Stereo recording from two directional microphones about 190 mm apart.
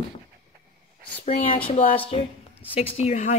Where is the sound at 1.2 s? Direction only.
30° left (ahead or behind).